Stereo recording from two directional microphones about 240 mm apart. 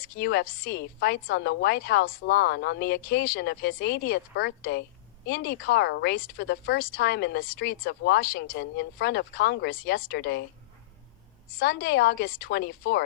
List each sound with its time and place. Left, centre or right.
0.0 s speech: left
11.6 s a woman's voice: left